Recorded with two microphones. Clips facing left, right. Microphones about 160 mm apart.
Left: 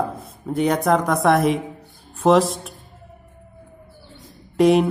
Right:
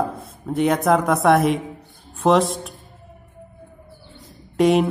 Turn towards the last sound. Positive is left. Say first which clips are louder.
# left 1 dB
turn(degrees=0)  # may be behind; listen again after turning